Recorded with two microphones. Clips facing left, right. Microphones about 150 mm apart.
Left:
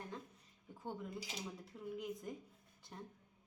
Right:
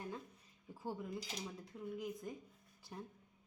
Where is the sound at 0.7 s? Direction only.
5° right (ahead or behind).